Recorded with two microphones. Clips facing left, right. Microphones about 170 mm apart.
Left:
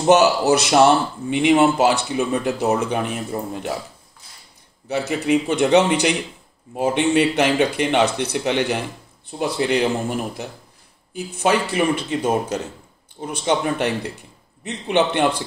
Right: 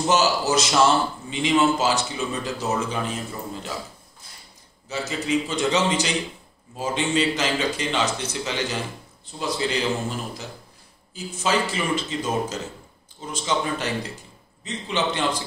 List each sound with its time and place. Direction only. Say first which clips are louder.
0.0 s speech: left 6 dB; 60° left (ahead or behind)
4.8 s speech: left 6 dB; 60° left (ahead or behind)